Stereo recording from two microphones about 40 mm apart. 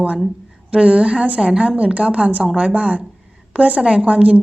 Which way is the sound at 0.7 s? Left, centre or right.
Right.